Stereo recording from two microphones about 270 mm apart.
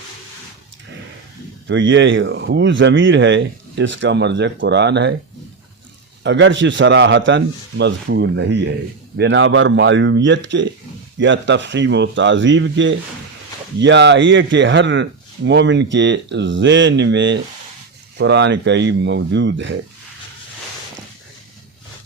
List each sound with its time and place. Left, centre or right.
1.6 s speech: right
6.2 s speech: right